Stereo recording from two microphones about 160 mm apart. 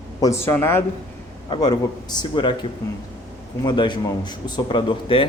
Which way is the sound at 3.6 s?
30° left (ahead or behind).